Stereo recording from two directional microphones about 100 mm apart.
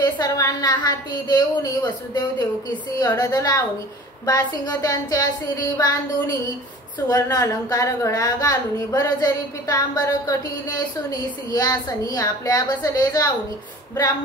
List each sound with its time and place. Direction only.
0.0 s a woman's voice: 35° left (ahead or behind)
3.0 s a woman's voice: 40° left (ahead or behind)